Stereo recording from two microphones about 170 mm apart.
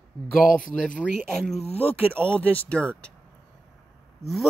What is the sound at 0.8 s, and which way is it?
Speech, 5° left (ahead or behind).